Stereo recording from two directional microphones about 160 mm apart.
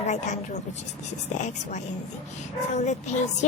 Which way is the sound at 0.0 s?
45° left (ahead or behind).